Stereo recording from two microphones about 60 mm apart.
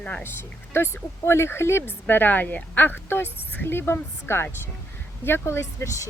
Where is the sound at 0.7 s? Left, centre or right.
Left.